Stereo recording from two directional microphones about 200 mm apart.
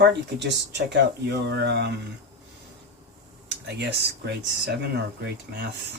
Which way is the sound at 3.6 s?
55° right (ahead or behind).